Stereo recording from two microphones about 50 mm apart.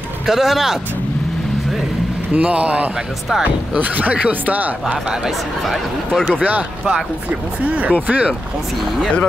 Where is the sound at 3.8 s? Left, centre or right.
Right.